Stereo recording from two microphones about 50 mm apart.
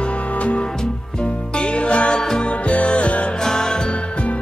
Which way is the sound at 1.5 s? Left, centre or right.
Left.